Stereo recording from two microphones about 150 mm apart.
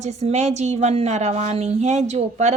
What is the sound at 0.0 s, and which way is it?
A woman's voice, 45° right (ahead or behind).